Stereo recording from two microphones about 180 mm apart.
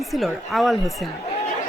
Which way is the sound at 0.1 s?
Centre (ahead or behind).